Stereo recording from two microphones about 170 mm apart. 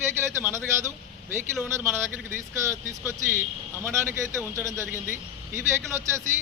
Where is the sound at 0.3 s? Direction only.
15° right (ahead or behind).